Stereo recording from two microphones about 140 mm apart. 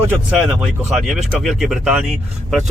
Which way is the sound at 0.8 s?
Centre (ahead or behind).